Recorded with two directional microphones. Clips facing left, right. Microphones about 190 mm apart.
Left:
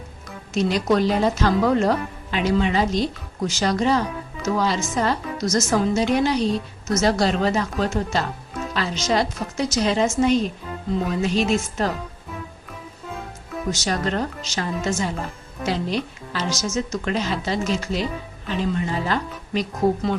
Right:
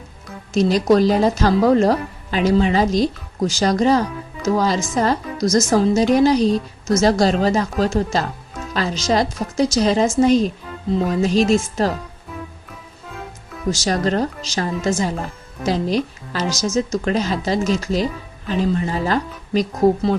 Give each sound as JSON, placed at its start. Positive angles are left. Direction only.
{"t": 0.5, "sound": "a woman's voice", "side_deg": -40}
{"t": 13.8, "sound": "a woman's voice", "side_deg": -40}